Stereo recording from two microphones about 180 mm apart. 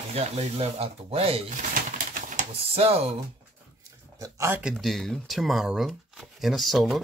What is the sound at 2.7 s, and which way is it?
Speech, 30° right (ahead or behind).